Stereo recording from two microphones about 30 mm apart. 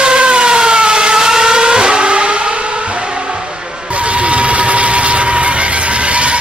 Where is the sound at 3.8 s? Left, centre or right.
Right.